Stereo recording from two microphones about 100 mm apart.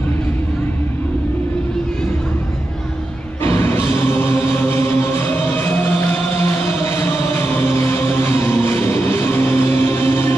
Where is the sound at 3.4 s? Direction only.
25° left (ahead or behind).